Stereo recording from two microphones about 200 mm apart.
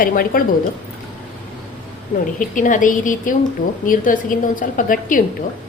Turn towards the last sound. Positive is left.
turn(degrees=40)  # may be behind; listen again after turning